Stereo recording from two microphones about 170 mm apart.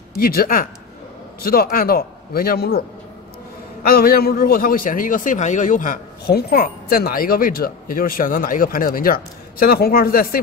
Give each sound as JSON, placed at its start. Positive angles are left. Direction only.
{"t": 0.2, "sound": "a man's voice", "side_deg": 60}
{"t": 3.8, "sound": "a man's voice", "side_deg": 60}